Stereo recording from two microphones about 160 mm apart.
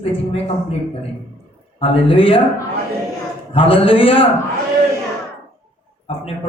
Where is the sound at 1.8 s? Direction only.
35° left (ahead or behind).